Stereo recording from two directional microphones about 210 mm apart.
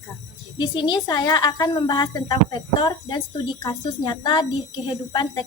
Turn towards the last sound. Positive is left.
turn(degrees=20)  # may be behind; listen again after turning